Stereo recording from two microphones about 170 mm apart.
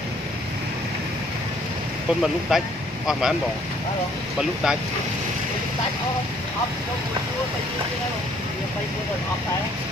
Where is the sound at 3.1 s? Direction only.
5° right (ahead or behind).